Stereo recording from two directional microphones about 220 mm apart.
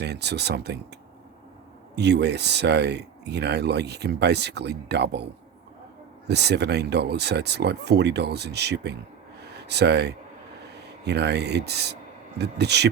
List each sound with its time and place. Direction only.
0.0 s speech: 50° right (ahead or behind)
2.0 s speech: 50° right (ahead or behind)
6.2 s speech: 50° right (ahead or behind)
9.4 s a sound: 50° right (ahead or behind)
11.0 s speech: 50° right (ahead or behind)